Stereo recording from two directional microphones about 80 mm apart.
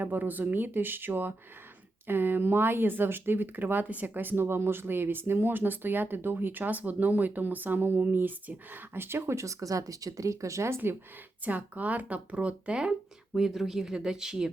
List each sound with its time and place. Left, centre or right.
0.0 s speech: right
11.4 s speech: centre